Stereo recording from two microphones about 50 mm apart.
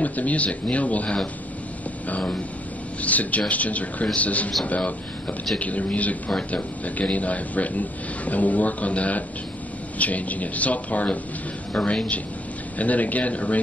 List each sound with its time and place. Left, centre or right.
0.0 s a man's voice: left